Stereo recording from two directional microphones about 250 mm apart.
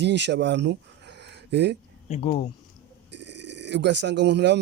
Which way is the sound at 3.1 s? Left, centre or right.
Right.